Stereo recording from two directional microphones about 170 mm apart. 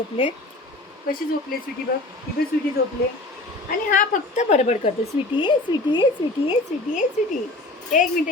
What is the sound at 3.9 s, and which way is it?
Speech, 50° left (ahead or behind).